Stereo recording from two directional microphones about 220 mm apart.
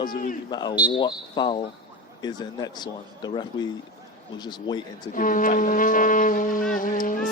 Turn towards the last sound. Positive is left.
turn(degrees=40)  # may be behind; listen again after turning